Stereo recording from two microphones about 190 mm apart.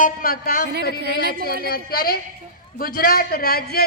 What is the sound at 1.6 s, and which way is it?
A woman's voice, 50° left (ahead or behind).